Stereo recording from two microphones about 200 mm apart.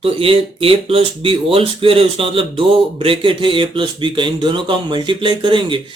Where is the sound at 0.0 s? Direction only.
30° right (ahead or behind).